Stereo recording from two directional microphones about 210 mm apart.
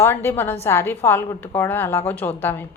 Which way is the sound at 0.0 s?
10° left (ahead or behind).